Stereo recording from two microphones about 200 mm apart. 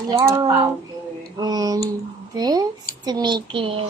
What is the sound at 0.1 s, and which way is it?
A child's voice, 15° right (ahead or behind).